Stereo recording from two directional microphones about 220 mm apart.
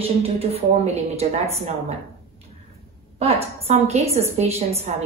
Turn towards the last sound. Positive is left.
turn(degrees=-30)  # may be behind; listen again after turning